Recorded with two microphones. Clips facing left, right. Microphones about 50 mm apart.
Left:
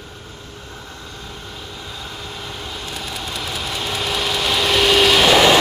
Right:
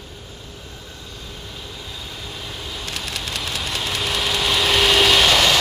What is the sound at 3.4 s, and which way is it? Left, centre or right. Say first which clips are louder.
Vehicle: left 1 dB; centre.